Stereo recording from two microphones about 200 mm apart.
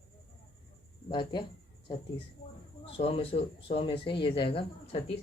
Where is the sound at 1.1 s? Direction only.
25° left (ahead or behind).